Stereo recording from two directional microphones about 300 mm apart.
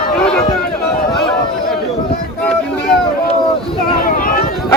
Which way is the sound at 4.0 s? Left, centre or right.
Left.